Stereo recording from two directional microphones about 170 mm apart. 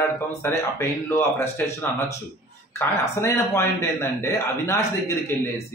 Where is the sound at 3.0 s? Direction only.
20° left (ahead or behind).